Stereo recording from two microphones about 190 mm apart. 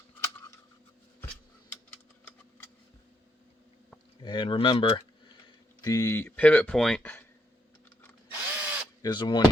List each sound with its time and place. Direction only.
4.2 s speech: 25° left (ahead or behind); by 7.3 s 10° left (ahead or behind)
8.3 s drill: 10° right (ahead or behind)
9.0 s speech: 20° left (ahead or behind)